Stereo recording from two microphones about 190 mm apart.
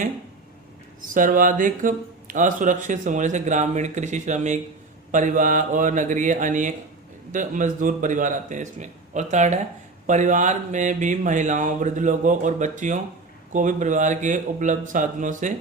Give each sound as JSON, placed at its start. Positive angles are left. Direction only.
{"t": 1.1, "sound": "speech", "side_deg": -45}